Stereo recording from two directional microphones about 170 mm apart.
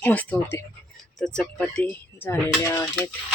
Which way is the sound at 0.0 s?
10° left (ahead or behind).